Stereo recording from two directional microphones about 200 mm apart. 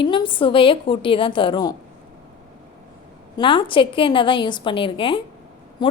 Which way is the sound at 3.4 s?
25° left (ahead or behind).